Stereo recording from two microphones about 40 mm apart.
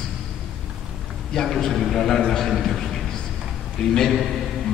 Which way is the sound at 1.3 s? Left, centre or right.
Centre.